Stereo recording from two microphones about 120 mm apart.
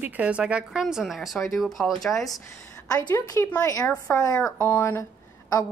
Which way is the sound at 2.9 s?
35° left (ahead or behind).